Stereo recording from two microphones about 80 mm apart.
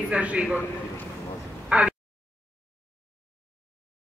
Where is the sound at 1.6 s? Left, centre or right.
Centre.